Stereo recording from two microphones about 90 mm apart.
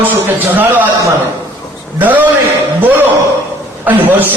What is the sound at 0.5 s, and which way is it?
Speech, 20° right (ahead or behind).